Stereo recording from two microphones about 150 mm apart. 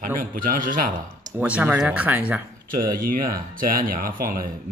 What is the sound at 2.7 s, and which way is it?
Speech, 75° right (ahead or behind).